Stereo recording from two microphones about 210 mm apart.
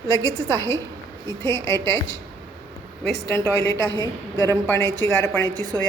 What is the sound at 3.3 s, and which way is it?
A woman's voice, 15° left (ahead or behind).